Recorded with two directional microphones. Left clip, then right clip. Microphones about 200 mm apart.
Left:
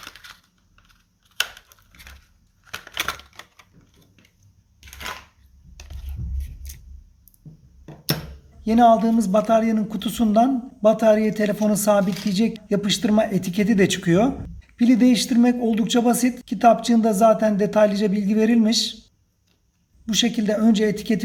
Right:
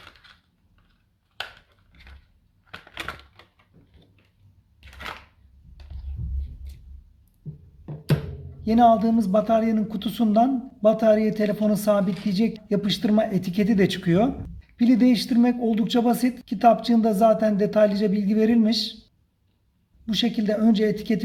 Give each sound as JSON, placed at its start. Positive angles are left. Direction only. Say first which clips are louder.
{"t": 1.7, "sound": "a sound", "louder": "left 7 dB", "side_deg": 5}
{"t": 2.6, "sound": "typewriter", "louder": "left 7 dB", "side_deg": 5}
{"t": 8.6, "sound": "speech", "louder": "left 2 dB", "side_deg": 0}
{"t": 20.1, "sound": "speech", "louder": "left 3 dB", "side_deg": 5}